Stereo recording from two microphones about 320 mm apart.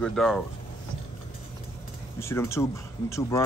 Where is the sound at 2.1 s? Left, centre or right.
Centre.